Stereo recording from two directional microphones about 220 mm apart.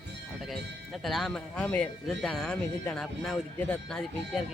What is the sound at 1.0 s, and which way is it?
Speech, centre (ahead or behind).